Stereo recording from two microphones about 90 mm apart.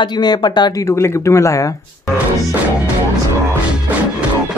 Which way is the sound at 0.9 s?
30° left (ahead or behind).